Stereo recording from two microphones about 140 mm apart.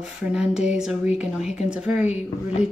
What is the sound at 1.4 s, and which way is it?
Speech, 55° left (ahead or behind).